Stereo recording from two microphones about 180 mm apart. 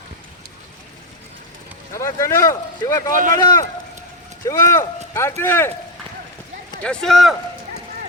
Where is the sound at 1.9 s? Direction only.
15° left (ahead or behind).